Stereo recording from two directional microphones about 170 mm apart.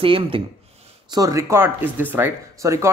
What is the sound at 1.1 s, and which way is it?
Speech, 20° right (ahead or behind).